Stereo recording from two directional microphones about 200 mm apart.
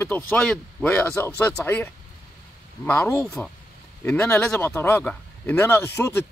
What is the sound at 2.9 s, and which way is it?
A man's voice, 10° left (ahead or behind).